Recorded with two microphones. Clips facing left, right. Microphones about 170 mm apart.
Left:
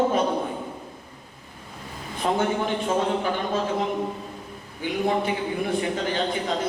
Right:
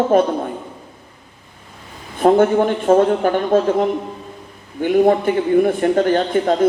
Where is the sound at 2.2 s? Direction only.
50° right (ahead or behind).